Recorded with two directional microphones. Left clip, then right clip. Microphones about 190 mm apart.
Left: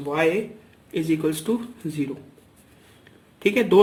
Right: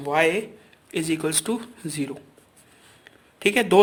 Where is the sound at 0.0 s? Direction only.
55° right (ahead or behind).